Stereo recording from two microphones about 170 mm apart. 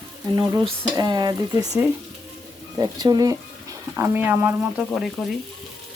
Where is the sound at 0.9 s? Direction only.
25° right (ahead or behind).